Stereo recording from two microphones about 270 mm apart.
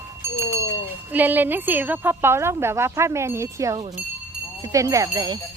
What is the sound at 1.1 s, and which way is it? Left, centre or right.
Speech, centre.